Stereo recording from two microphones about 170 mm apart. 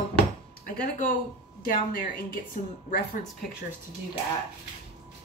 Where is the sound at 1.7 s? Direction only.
55° left (ahead or behind).